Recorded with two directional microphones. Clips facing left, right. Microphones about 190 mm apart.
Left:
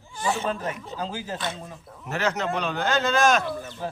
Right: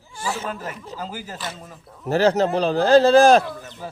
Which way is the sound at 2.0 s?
35° right (ahead or behind).